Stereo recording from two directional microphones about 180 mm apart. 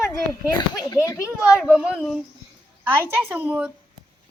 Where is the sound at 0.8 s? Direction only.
20° left (ahead or behind).